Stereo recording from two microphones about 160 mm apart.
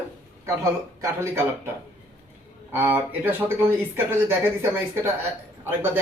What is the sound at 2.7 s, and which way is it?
A man's voice, 15° right (ahead or behind).